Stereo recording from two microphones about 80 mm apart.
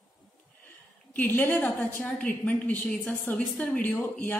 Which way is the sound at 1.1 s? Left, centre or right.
Left.